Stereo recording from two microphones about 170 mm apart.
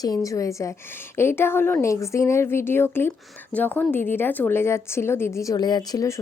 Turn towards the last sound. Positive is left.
turn(degrees=20)  # may be behind; listen again after turning